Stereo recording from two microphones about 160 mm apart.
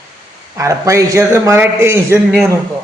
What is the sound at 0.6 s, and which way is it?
A man's voice, 20° right (ahead or behind).